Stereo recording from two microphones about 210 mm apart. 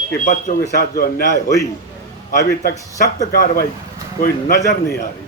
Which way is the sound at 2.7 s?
15° left (ahead or behind).